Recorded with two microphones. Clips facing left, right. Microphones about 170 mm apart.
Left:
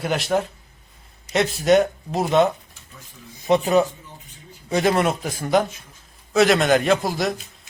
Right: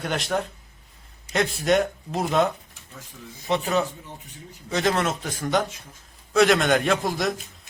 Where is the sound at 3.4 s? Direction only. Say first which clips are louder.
Left 6 dB; 15° left (ahead or behind); by 7.4 s centre (ahead or behind).